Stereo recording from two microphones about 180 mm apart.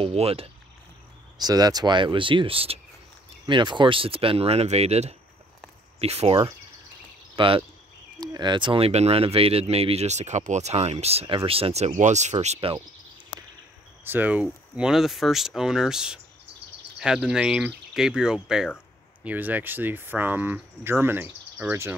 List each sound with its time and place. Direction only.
0.0 s speech: 35° right (ahead or behind)
1.4 s speech: 20° right (ahead or behind)
14.0 s speech: 10° right (ahead or behind)